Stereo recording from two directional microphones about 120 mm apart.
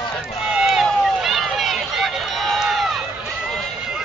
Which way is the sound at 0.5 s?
5° right (ahead or behind).